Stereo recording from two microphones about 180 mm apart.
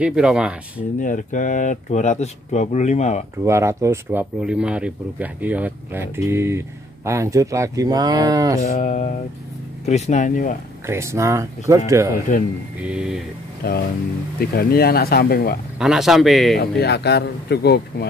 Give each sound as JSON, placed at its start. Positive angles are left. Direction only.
{"t": 0.0, "sound": "speech", "side_deg": -5}
{"t": 0.9, "sound": "speech", "side_deg": 45}
{"t": 3.4, "sound": "speech", "side_deg": -15}
{"t": 8.5, "sound": "speech", "side_deg": 40}
{"t": 10.9, "sound": "speech", "side_deg": -15}
{"t": 12.3, "sound": "speech", "side_deg": 45}
{"t": 12.8, "sound": "speech", "side_deg": -5}
{"t": 13.6, "sound": "speech", "side_deg": 60}
{"t": 15.8, "sound": "speech", "side_deg": 0}
{"t": 16.5, "sound": "speech", "side_deg": 70}